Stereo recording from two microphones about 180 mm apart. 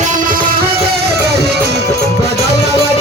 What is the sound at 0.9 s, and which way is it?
Music, 60° right (ahead or behind).